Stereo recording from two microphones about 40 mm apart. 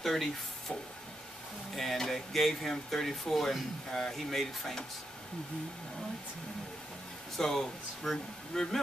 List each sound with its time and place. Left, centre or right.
0.0 s speech: centre
1.8 s speech: centre
7.3 s speech: centre